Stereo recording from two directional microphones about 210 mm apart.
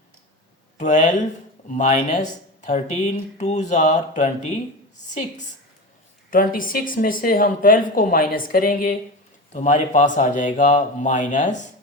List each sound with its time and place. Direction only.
0.8 s speech: 35° left (ahead or behind)
6.3 s speech: 40° left (ahead or behind)